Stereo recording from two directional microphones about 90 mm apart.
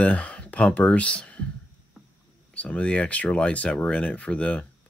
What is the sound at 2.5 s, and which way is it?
Speech, 15° left (ahead or behind).